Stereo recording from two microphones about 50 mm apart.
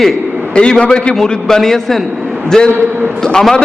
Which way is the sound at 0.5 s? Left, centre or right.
Centre.